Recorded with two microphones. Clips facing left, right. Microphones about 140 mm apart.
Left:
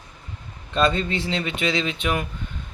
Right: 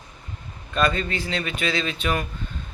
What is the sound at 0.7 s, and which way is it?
A man's voice, 25° left (ahead or behind).